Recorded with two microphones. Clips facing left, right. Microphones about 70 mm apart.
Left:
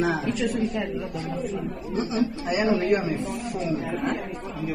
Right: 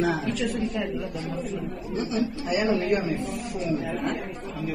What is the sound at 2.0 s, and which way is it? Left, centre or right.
Speech, left.